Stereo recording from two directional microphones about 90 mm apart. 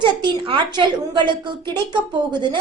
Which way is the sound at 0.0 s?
60° right (ahead or behind).